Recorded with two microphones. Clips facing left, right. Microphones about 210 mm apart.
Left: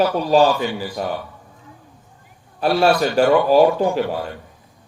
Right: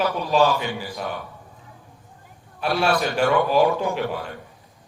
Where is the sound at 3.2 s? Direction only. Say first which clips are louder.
Left 6 dB; 35° left (ahead or behind).